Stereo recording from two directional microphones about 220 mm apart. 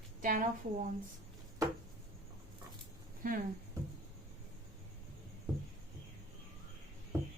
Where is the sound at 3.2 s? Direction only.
40° right (ahead or behind).